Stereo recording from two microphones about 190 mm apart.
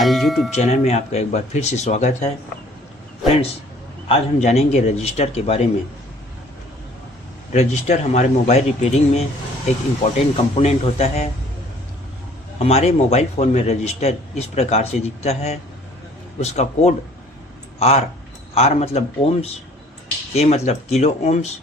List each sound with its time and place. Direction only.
0.0 s speech: centre (ahead or behind)
0.5 s a man's voice: 35° left (ahead or behind)
4.1 s a man's voice: 35° left (ahead or behind)
7.5 s a man's voice: 35° left (ahead or behind)
10.3 s a man's voice: 35° left (ahead or behind)
12.5 s a man's voice: 35° left (ahead or behind)